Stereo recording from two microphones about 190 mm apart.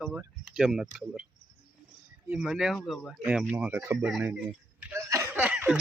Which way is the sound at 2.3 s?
5° right (ahead or behind).